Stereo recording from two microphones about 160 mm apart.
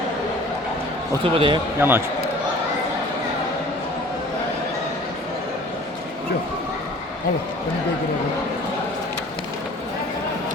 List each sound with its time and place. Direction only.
1.2 s speech: 35° right (ahead or behind)
1.8 s a man's voice: 15° right (ahead or behind)